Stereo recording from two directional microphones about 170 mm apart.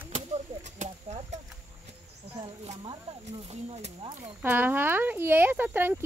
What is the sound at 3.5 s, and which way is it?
Speech, 40° right (ahead or behind).